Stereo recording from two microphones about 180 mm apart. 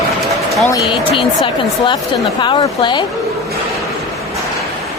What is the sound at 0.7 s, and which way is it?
Speech, 30° left (ahead or behind).